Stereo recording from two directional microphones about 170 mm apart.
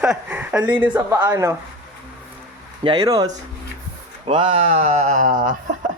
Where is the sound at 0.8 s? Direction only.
15° right (ahead or behind).